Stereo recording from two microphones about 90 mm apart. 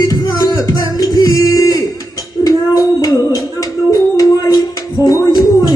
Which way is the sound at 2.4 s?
45° left (ahead or behind).